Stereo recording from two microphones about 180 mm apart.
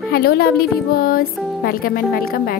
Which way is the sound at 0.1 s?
60° left (ahead or behind).